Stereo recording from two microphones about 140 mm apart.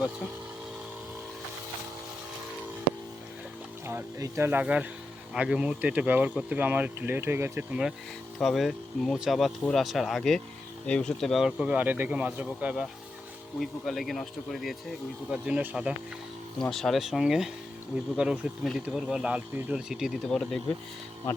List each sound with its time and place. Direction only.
3.8 s speech: 20° right (ahead or behind)
8.4 s speech: centre (ahead or behind)
16.6 s speech: 5° left (ahead or behind)